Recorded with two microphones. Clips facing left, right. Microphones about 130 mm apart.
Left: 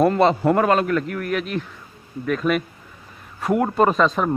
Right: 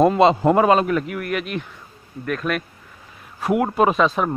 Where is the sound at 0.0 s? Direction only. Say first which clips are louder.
Right 2 dB; 20° right (ahead or behind).